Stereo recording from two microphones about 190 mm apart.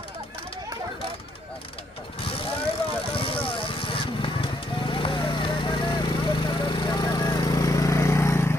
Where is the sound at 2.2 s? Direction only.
30° left (ahead or behind).